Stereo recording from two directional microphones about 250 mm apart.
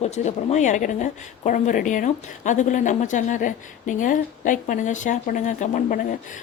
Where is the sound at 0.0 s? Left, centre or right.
Left.